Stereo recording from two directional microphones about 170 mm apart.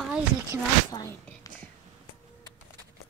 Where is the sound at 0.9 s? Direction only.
20° left (ahead or behind).